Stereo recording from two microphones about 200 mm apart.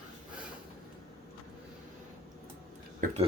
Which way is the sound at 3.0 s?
45° right (ahead or behind).